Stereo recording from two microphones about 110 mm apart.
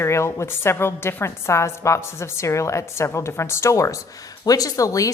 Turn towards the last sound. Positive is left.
turn(degrees=30)  # may be behind; listen again after turning